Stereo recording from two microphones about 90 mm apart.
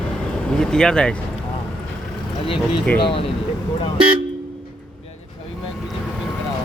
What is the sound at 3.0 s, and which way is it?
Speech, 90° left.